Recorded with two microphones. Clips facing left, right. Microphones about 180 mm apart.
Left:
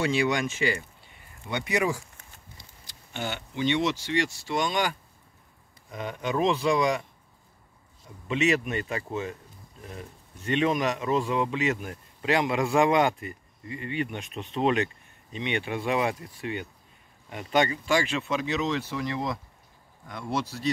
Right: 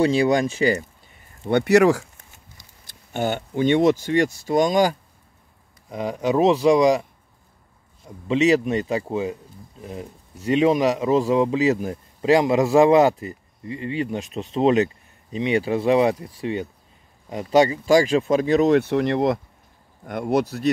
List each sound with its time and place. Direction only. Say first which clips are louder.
0.0 s speech: right 7 dB; 35° right (ahead or behind)
1.5 s speech: right 12 dB; 70° right (ahead or behind)
2.9 s speech: right 10 dB; 45° right (ahead or behind)
6.3 s speech: right 8 dB; 25° right (ahead or behind)
8.3 s speech: right 7 dB; 35° right (ahead or behind)
10.6 s speech: right 7 dB; 30° right (ahead or behind)
17.3 s speech: right 8 dB; 35° right (ahead or behind); by 19.4 s 65° right (ahead or behind)
20.1 s speech: right 9 dB; 50° right (ahead or behind)